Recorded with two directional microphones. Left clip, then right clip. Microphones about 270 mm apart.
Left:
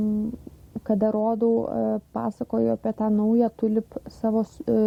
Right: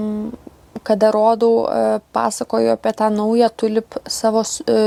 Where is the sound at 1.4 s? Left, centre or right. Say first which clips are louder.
Right 8 dB; right.